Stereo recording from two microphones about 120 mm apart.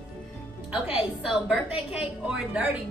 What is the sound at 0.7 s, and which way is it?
Music, 5° right (ahead or behind).